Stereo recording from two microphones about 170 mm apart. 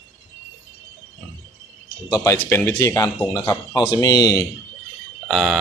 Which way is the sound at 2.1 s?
20° left (ahead or behind).